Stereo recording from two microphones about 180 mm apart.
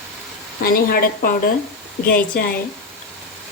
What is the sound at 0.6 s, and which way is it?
A woman's voice, 55° left (ahead or behind).